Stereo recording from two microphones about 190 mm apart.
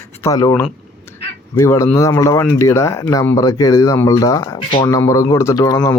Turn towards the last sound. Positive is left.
turn(degrees=20)  # may be behind; listen again after turning